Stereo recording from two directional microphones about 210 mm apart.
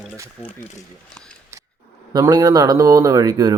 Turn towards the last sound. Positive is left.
turn(degrees=-15)  # may be behind; listen again after turning